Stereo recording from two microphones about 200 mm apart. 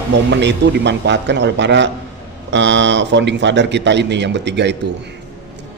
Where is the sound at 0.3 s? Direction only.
60° right (ahead or behind).